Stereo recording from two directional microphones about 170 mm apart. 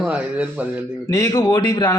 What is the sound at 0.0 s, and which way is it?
Speech, 5° right (ahead or behind).